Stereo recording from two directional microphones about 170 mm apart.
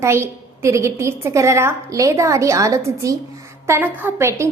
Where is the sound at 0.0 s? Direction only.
15° right (ahead or behind).